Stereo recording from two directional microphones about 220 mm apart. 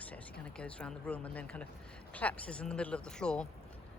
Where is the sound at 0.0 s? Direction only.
5° left (ahead or behind).